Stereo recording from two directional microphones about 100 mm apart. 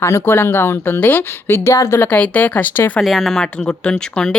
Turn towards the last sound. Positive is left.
turn(degrees=10)  # may be behind; listen again after turning